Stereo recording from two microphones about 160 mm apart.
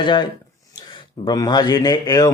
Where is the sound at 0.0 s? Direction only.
30° left (ahead or behind).